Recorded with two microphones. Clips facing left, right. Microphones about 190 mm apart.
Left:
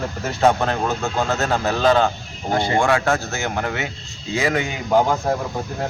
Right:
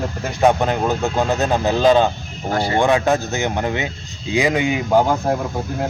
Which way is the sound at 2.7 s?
20° right (ahead or behind).